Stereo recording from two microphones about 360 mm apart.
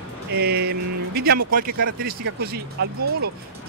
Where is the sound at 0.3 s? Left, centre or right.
Right.